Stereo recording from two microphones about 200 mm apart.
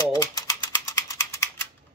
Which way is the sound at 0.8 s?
15° left (ahead or behind).